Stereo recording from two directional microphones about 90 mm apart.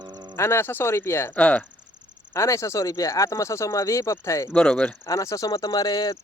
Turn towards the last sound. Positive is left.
turn(degrees=50)  # may be behind; listen again after turning